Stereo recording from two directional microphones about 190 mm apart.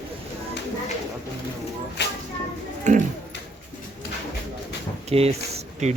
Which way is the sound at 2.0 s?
65° left (ahead or behind).